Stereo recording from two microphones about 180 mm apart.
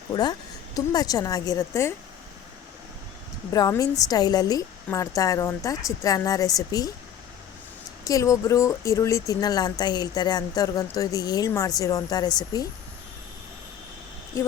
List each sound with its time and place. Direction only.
0.1 s speech: 25° left (ahead or behind)
3.5 s speech: 20° left (ahead or behind)
8.0 s speech: 20° left (ahead or behind)